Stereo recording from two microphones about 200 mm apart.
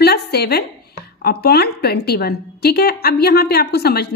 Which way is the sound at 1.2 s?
50° left (ahead or behind).